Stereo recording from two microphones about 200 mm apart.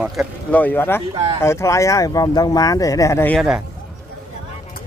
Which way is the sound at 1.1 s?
25° right (ahead or behind).